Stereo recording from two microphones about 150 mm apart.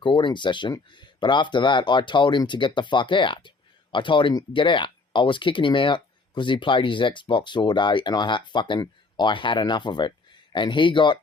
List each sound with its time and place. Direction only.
0.0 s speech: 30° left (ahead or behind)